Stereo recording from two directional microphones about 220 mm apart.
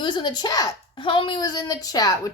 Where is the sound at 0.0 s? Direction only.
20° left (ahead or behind).